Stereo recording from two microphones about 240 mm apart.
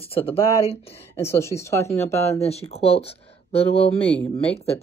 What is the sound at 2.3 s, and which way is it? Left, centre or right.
Speech, left.